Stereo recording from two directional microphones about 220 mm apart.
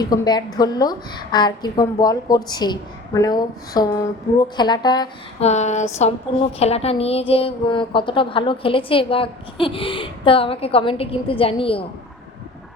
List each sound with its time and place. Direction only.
0.0 s a woman's voice: 20° left (ahead or behind)
5.5 s a sound: 30° left (ahead or behind)
6.6 s a woman's voice: 30° left (ahead or behind)